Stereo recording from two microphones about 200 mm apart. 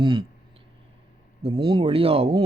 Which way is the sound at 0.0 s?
25° right (ahead or behind).